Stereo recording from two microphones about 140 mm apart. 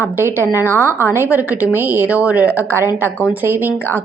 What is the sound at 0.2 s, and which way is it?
A woman's voice, 15° right (ahead or behind).